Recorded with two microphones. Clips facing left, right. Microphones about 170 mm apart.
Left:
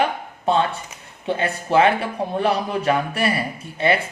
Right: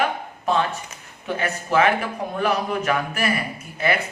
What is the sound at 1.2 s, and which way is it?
Speech, 30° left (ahead or behind).